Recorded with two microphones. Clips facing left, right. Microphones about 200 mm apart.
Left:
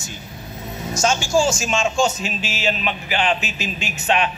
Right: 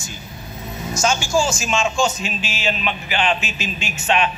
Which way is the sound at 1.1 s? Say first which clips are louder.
Left 2 dB; 25° left (ahead or behind).